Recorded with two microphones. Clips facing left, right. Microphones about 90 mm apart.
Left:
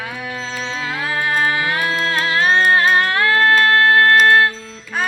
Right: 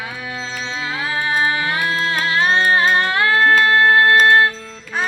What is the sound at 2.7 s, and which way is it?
Music, 20° right (ahead or behind).